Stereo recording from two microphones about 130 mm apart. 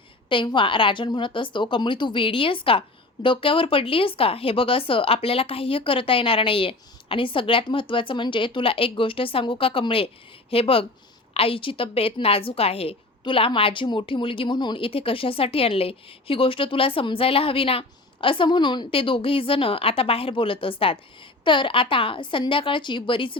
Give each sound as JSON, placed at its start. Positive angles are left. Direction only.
{"t": 0.3, "sound": "a woman's voice", "side_deg": 40}